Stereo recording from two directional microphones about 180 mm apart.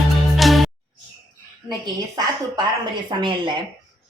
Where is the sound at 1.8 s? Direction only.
25° right (ahead or behind).